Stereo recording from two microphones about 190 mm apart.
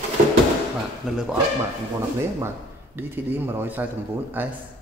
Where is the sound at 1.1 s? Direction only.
5° right (ahead or behind).